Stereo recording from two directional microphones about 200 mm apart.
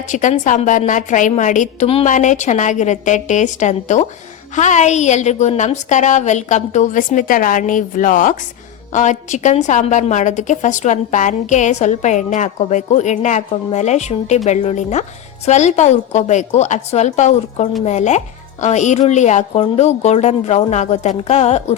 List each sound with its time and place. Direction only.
0.1 s a woman's voice: 40° left (ahead or behind)